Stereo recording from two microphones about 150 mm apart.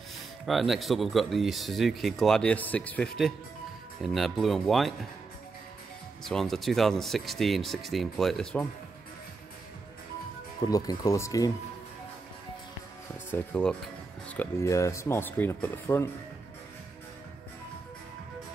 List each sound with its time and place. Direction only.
0.5 s speech: centre (ahead or behind)
6.2 s speech: centre (ahead or behind)
10.6 s speech: 25° left (ahead or behind)
13.3 s speech: 10° left (ahead or behind)